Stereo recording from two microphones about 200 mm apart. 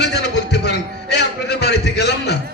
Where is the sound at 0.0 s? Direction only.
55° left (ahead or behind).